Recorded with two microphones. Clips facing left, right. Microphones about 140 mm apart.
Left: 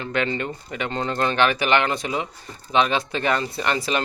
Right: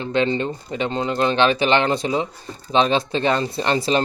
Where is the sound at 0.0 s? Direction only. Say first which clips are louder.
Right 4 dB; 25° right (ahead or behind).